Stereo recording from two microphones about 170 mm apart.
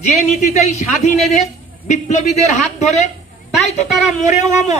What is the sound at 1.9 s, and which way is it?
A man's voice, 45° left (ahead or behind).